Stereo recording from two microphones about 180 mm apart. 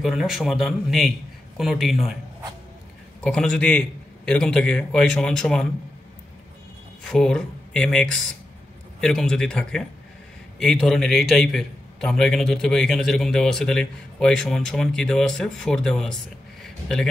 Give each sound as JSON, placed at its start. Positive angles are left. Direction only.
{"t": 0.0, "sound": "a man's voice", "side_deg": 0}
{"t": 3.2, "sound": "a man's voice", "side_deg": 5}
{"t": 7.1, "sound": "a man's voice", "side_deg": 5}